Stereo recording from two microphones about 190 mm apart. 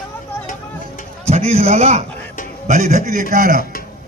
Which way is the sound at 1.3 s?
35° right (ahead or behind).